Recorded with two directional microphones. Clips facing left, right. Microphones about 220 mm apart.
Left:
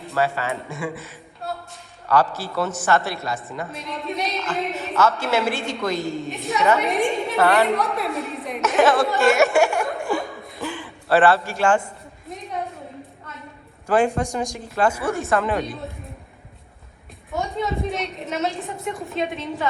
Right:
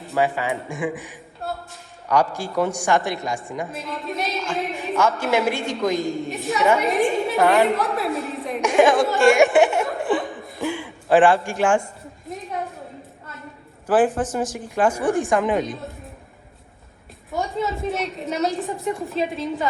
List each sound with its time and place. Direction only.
0.1 s a woman's voice: 15° right (ahead or behind)
3.7 s a sound: centre (ahead or behind)
4.8 s a woman's voice: 10° right (ahead or behind)
8.6 s speech: 15° right (ahead or behind)
9.2 s a sound: 15° right (ahead or behind)
10.0 s chuckle: centre (ahead or behind)
10.6 s music: 15° right (ahead or behind)
13.8 s a woman's voice: 5° right (ahead or behind)
17.3 s a woman's voice: centre (ahead or behind)